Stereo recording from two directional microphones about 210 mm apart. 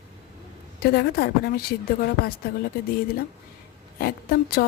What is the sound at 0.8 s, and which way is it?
A woman's voice, 45° left (ahead or behind).